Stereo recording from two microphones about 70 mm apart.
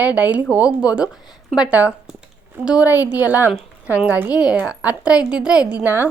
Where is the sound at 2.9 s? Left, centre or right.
Right.